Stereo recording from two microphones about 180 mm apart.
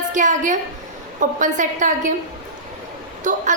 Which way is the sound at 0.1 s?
45° right (ahead or behind).